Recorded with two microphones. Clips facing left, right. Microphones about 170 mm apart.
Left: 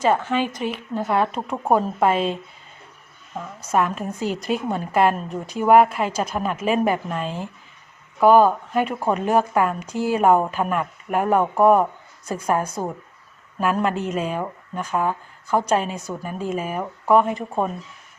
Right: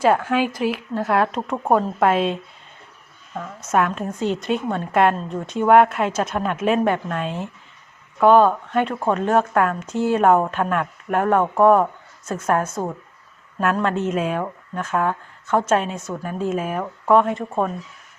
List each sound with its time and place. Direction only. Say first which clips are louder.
0.0 s speech: right 2 dB; 5° right (ahead or behind)
3.7 s speech: right 1 dB; centre (ahead or behind)
13.8 s speech: right 2 dB; centre (ahead or behind)